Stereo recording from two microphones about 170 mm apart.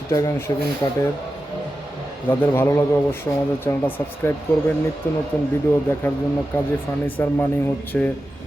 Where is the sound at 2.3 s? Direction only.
15° left (ahead or behind).